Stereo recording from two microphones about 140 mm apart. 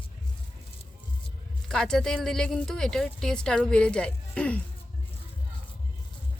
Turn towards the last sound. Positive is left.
turn(degrees=10)  # may be behind; listen again after turning